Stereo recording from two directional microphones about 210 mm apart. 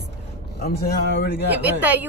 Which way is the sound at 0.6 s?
45° left (ahead or behind).